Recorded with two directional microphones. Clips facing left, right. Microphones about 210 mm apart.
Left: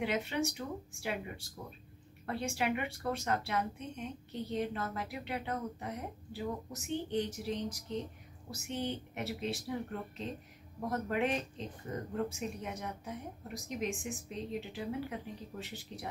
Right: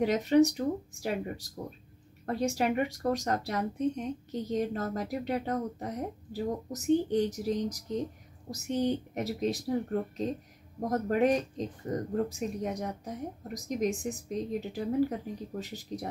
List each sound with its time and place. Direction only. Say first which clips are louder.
0.0 s speech: right 10 dB; 40° right (ahead or behind)